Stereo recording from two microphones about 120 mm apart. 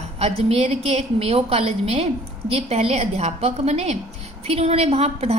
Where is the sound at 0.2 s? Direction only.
60° right (ahead or behind).